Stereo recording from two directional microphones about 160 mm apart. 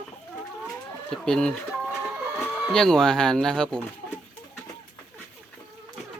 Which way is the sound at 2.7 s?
5° left (ahead or behind).